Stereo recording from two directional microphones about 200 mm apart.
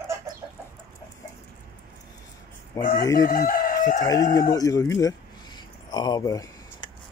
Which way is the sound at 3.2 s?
40° left (ahead or behind).